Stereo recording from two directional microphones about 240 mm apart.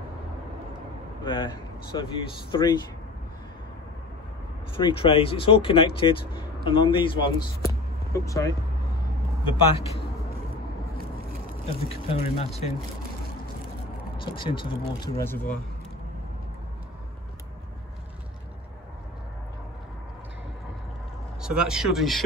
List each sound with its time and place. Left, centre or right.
1.2 s speech: centre
4.7 s speech: left
9.4 s speech: left
11.6 s speech: left
14.1 s speech: left
21.4 s speech: centre